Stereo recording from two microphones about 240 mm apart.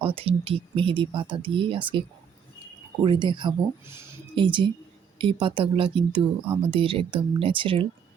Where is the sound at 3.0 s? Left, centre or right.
Centre.